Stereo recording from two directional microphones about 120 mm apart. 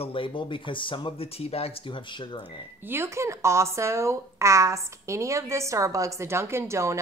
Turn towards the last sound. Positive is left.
turn(degrees=-25)  # may be behind; listen again after turning